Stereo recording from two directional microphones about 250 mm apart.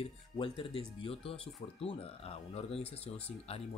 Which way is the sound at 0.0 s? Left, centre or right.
Left.